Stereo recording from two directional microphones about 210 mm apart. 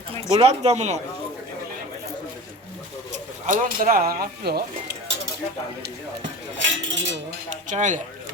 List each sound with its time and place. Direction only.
0.1 s speech: 25° right (ahead or behind)
3.4 s speech: 40° right (ahead or behind)
6.6 s cutlery: 60° right (ahead or behind)
7.5 s speech: 35° right (ahead or behind)